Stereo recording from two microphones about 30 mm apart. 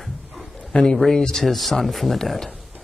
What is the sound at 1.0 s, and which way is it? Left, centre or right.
Speech, centre.